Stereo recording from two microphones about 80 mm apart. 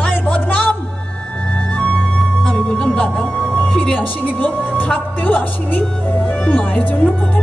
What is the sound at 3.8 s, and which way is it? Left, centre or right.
A man's voice, left.